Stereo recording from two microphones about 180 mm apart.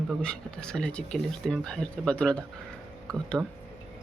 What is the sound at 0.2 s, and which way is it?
Speech, 5° left (ahead or behind).